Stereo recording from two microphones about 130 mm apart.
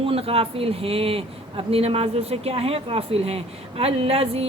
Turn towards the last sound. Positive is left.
turn(degrees=-50)  # may be behind; listen again after turning